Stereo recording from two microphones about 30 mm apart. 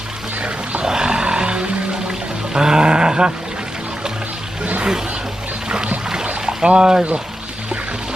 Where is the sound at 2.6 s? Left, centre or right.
Right.